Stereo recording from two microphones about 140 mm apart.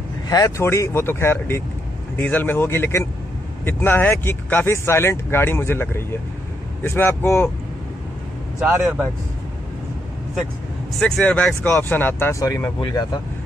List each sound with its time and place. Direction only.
0.3 s speech: 20° left (ahead or behind)
8.5 s speech: 15° right (ahead or behind)
11.0 s speech: 5° left (ahead or behind); by 13.0 s 25° left (ahead or behind)